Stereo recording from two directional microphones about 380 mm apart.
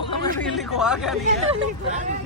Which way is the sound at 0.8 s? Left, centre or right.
Centre.